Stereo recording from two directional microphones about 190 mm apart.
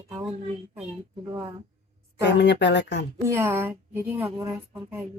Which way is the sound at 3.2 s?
15° right (ahead or behind).